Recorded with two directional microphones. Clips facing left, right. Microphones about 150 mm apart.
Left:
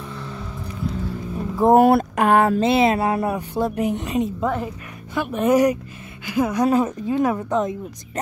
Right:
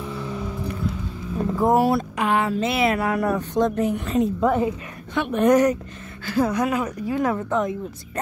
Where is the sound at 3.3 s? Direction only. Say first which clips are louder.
Right 2 dB; 10° left (ahead or behind).